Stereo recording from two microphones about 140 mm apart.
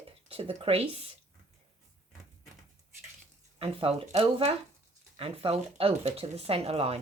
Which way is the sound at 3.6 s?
40° right (ahead or behind).